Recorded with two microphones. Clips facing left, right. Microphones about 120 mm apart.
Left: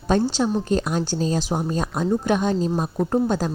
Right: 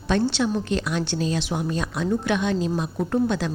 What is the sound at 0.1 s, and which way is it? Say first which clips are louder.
A woman's voice: left 2 dB; 40° left (ahead or behind).